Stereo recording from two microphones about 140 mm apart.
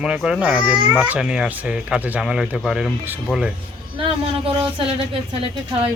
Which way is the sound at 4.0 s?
40° right (ahead or behind).